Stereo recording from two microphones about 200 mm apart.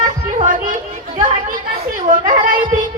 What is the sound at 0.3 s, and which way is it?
Music, 40° right (ahead or behind).